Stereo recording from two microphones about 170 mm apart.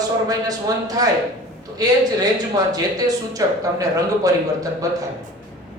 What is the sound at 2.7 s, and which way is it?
A man's voice, 20° right (ahead or behind).